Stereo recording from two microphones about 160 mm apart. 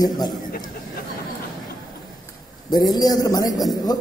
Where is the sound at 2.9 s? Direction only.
25° left (ahead or behind).